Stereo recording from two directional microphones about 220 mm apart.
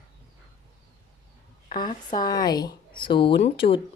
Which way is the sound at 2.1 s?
20° left (ahead or behind).